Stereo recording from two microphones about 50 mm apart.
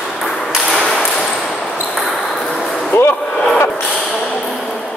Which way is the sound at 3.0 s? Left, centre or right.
Left.